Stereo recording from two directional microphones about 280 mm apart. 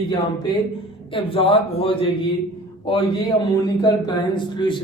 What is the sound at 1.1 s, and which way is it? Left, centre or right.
A man's voice, centre.